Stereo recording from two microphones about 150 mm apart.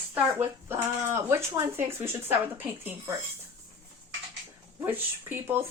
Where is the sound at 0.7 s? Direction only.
15° right (ahead or behind).